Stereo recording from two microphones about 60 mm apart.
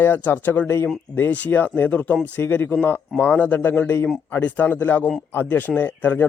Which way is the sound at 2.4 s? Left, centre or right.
Left.